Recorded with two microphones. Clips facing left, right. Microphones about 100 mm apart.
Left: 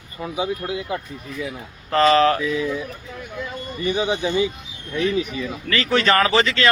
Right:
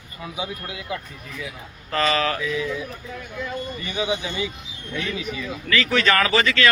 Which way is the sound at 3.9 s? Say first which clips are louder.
Left 4 dB; 30° left (ahead or behind).